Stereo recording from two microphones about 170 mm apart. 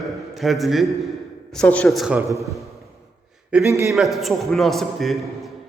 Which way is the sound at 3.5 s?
15° right (ahead or behind).